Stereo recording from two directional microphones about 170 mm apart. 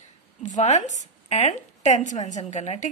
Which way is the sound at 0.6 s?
45° left (ahead or behind).